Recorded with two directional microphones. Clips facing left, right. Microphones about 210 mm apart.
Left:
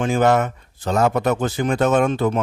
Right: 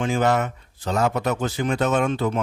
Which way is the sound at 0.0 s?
50° left (ahead or behind).